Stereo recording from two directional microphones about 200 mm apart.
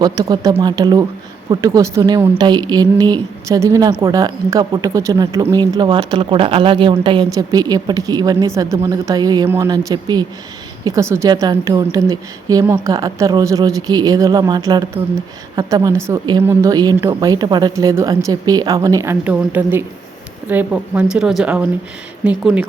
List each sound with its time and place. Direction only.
0.0 s a woman's voice: 20° right (ahead or behind)